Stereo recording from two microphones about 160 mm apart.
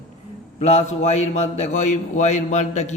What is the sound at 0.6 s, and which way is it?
A man's voice, 45° left (ahead or behind).